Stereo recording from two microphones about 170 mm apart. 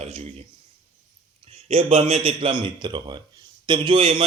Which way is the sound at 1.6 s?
35° right (ahead or behind).